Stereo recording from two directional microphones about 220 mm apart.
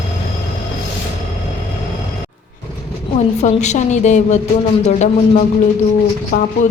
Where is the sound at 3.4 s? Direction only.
30° left (ahead or behind).